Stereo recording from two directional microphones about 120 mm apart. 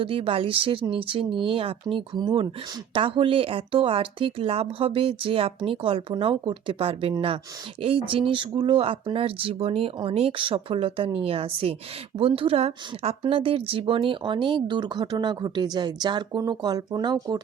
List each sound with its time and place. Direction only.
0.0 s speech: 50° right (ahead or behind); by 17.4 s 35° right (ahead or behind)